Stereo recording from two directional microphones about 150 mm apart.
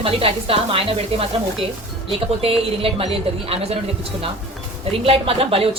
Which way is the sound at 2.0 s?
40° right (ahead or behind).